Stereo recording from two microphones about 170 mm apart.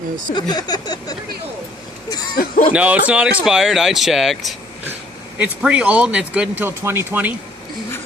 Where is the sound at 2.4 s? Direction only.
55° left (ahead or behind).